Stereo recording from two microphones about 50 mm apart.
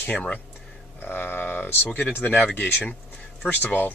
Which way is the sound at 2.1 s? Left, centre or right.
Left.